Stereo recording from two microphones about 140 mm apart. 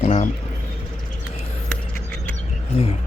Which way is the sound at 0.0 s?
55° left (ahead or behind).